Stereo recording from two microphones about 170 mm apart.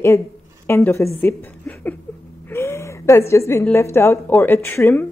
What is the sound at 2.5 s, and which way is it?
Gasp, 15° left (ahead or behind).